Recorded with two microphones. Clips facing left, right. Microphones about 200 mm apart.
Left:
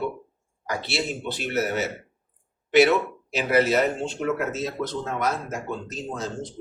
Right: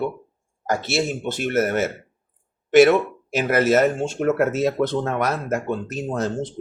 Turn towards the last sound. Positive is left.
turn(degrees=-60)  # may be behind; listen again after turning